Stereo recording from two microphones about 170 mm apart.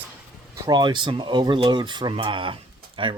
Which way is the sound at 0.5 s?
20° right (ahead or behind).